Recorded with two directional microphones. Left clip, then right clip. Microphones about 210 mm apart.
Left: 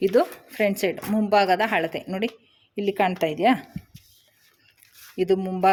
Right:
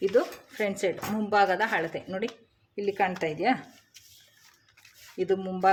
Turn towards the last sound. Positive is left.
turn(degrees=35)  # may be behind; listen again after turning